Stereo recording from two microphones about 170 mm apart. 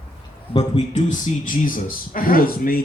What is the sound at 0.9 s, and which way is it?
Speech, 45° left (ahead or behind).